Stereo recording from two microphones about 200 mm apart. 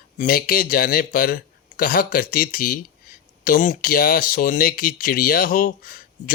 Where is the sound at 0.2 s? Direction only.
45° left (ahead or behind).